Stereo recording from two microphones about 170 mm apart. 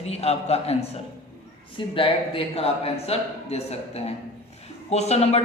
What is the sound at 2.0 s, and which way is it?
A man's voice, 35° left (ahead or behind).